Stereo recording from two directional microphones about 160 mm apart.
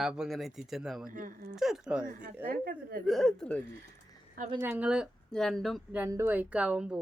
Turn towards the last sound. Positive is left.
turn(degrees=-5)  # may be behind; listen again after turning